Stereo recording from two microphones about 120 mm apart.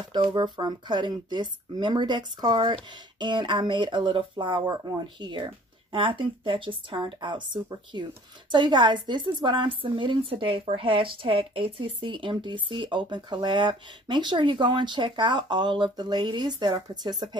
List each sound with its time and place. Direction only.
0.1 s a woman's voice: 45° right (ahead or behind)